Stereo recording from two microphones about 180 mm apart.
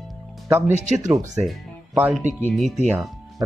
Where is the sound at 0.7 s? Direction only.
40° right (ahead or behind).